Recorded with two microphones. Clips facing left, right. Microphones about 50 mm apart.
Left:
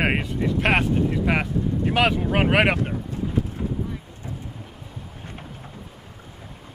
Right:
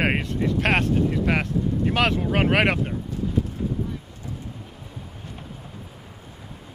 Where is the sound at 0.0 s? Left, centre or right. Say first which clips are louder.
Even; centre.